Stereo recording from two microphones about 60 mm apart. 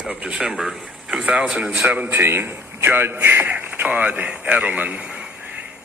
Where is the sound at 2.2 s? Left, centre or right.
Right.